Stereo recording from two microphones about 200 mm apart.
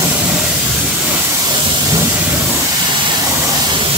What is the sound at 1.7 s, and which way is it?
Steam, 15° right (ahead or behind).